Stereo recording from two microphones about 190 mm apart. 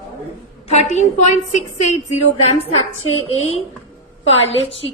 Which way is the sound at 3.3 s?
90° left.